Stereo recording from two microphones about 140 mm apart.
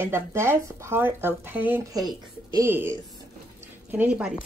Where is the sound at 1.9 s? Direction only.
25° right (ahead or behind).